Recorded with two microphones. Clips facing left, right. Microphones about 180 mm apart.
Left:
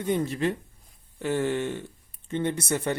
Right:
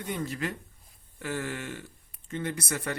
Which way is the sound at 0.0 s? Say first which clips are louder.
Left 7 dB; 25° left (ahead or behind).